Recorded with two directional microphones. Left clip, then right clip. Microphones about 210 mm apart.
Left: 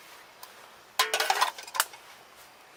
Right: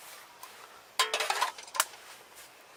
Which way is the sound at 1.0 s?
20° left (ahead or behind).